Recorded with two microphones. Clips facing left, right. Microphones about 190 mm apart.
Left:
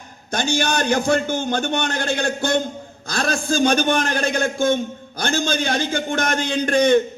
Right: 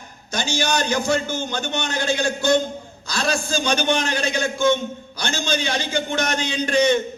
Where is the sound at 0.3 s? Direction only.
55° left (ahead or behind).